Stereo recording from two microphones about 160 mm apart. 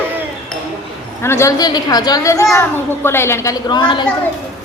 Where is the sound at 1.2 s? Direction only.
15° left (ahead or behind).